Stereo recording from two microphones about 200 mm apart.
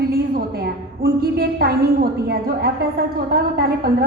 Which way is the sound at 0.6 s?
50° right (ahead or behind).